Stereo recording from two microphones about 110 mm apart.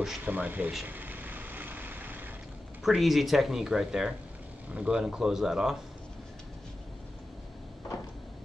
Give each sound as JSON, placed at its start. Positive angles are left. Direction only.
{"t": 0.2, "sound": "speech", "side_deg": -15}
{"t": 0.8, "sound": "vehicle", "side_deg": -15}
{"t": 2.8, "sound": "speech", "side_deg": 0}